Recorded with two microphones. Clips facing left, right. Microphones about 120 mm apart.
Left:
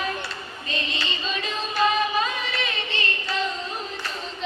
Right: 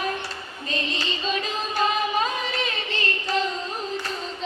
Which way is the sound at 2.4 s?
40° right (ahead or behind).